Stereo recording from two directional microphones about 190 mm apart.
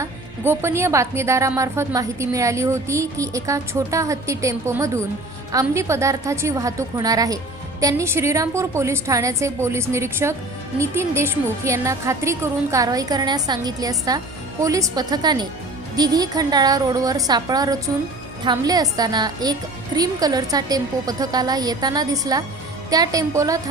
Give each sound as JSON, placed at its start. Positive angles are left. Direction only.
{"t": 0.0, "sound": "a woman's voice", "side_deg": -15}